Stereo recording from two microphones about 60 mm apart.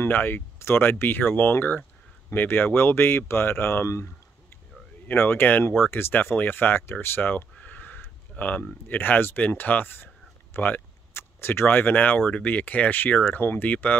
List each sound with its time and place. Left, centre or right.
0.0 s speech: left
5.0 s speech: left
7.5 s a sound: left
8.8 s speech: left